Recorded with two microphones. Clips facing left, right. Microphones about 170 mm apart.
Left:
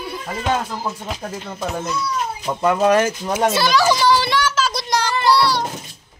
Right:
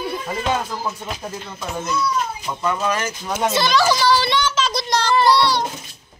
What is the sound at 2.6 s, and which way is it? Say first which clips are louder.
Speech: left 7 dB; 55° left (ahead or behind).